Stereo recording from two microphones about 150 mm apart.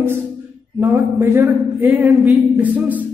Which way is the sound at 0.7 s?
15° right (ahead or behind).